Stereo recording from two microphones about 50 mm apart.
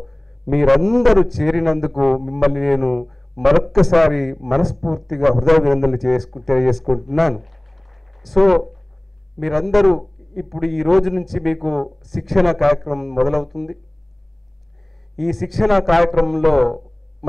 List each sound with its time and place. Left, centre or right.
0.0 s a man's voice: centre
15.1 s a man's voice: centre